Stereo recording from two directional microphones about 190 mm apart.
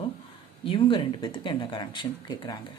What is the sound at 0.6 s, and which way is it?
Speech, 25° left (ahead or behind).